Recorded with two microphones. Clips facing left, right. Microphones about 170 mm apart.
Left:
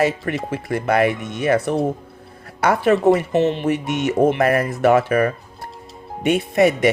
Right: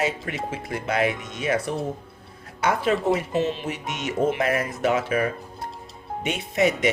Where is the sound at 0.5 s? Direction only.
60° left (ahead or behind).